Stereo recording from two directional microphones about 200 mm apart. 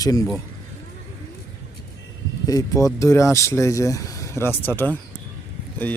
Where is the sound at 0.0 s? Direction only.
20° left (ahead or behind).